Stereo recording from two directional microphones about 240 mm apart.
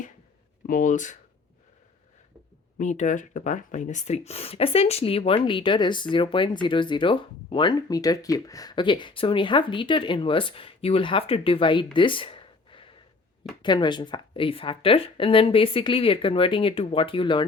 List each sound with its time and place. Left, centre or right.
0.7 s speech: left
2.7 s speech: left
11.9 s a sound: left
13.6 s speech: centre